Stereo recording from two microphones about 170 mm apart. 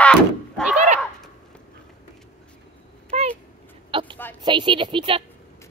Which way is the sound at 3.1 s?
40° right (ahead or behind).